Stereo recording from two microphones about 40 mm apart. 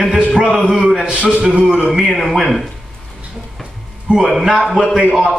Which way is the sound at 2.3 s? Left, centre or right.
Centre.